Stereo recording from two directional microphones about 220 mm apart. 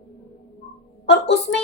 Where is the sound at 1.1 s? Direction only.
50° left (ahead or behind).